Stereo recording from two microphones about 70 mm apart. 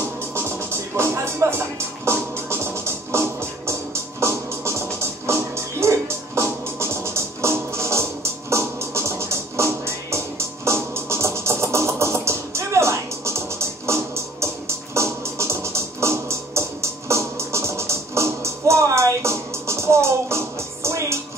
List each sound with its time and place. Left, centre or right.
0.3 s music: right